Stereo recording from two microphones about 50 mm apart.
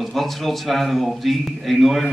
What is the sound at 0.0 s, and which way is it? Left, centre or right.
A man's voice, centre.